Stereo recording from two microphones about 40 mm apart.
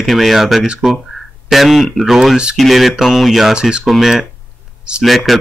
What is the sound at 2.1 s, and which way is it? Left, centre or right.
Speech, centre.